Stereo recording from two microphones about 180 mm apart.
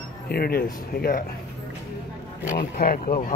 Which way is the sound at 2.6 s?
55° left (ahead or behind).